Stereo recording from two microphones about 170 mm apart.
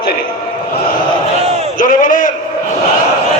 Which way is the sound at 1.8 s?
50° left (ahead or behind).